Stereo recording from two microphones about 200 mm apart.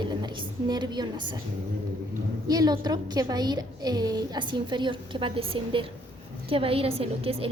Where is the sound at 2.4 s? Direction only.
20° right (ahead or behind).